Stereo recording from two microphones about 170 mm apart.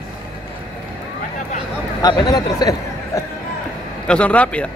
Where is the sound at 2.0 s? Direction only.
25° left (ahead or behind).